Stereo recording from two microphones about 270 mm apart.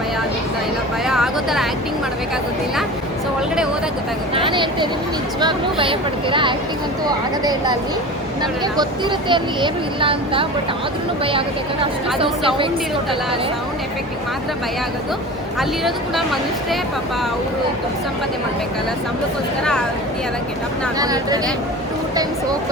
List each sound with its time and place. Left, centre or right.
1.0 s a sound: centre
4.4 s speech: centre
8.8 s speech: centre
15.8 s speech: centre
21.0 s speech: centre